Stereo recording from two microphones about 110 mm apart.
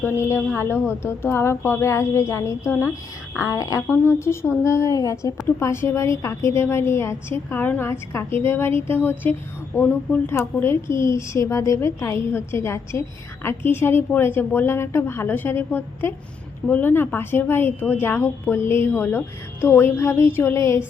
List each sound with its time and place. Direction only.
0.0 s speech: 20° left (ahead or behind)